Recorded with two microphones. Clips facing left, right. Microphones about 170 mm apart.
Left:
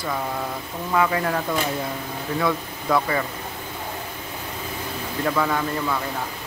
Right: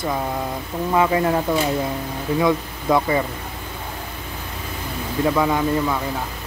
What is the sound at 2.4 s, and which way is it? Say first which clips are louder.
Speech: right 4 dB; 20° right (ahead or behind).